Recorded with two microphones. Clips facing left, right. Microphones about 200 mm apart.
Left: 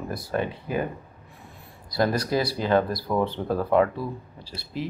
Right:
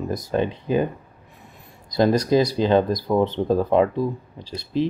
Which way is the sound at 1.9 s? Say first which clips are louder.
Right 6 dB; 20° right (ahead or behind).